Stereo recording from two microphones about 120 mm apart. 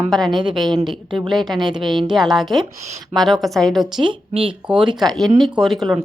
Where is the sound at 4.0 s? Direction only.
45° right (ahead or behind).